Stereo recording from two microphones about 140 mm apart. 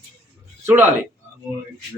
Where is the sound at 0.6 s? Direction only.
15° right (ahead or behind).